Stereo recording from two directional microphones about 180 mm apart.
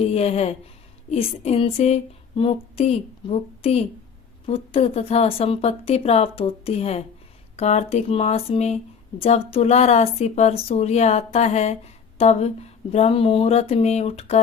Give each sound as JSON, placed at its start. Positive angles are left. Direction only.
{"t": 0.0, "sound": "speech", "side_deg": 35}